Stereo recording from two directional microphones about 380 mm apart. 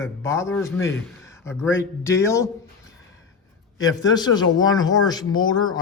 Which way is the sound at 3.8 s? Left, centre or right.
Centre.